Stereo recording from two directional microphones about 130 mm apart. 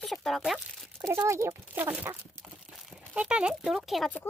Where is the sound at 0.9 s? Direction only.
20° right (ahead or behind).